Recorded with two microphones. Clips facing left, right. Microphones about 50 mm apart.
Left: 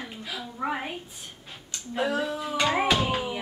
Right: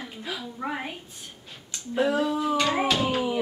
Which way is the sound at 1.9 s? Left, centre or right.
Centre.